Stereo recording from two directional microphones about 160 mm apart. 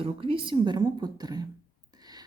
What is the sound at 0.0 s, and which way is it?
A woman's voice, 35° right (ahead or behind).